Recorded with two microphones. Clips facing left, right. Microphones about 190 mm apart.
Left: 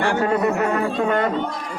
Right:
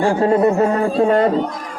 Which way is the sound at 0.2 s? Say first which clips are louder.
Right 5 dB; 30° right (ahead or behind).